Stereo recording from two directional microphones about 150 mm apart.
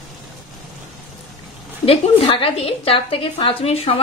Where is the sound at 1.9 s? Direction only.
40° left (ahead or behind).